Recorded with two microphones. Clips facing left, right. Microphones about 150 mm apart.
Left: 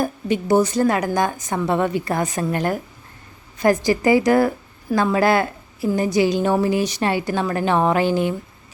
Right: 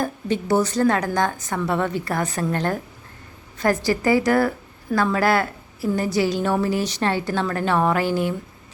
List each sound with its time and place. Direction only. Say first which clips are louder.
0.0 s a woman's voice: left 2 dB; 15° left (ahead or behind)